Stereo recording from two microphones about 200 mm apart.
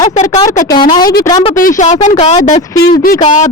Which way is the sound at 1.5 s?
40° left (ahead or behind).